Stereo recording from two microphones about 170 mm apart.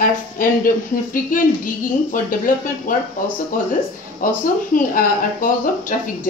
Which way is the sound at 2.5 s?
55° left (ahead or behind).